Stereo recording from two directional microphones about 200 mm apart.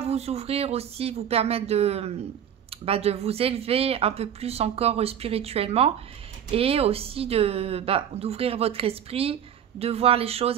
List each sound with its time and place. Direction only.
0.0 s a woman's voice: 30° right (ahead or behind)